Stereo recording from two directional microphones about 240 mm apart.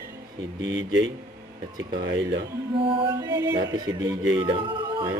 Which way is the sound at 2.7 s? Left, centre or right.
Right.